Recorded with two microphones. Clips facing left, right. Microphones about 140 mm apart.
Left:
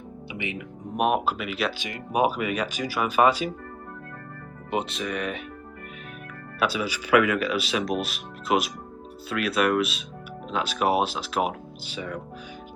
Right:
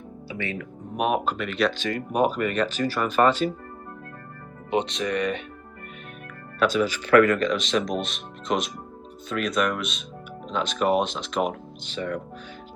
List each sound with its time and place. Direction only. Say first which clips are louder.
0.3 s music: right 2 dB; 20° left (ahead or behind)
0.9 s speech: left 1 dB; centre (ahead or behind)
4.7 s speech: right 3 dB; 5° left (ahead or behind)
6.6 s speech: right 4 dB; 10° left (ahead or behind)